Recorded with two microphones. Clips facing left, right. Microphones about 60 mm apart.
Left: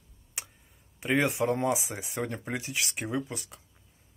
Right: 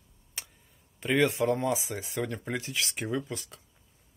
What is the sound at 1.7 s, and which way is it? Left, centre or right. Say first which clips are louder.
Speech: left 1 dB; centre.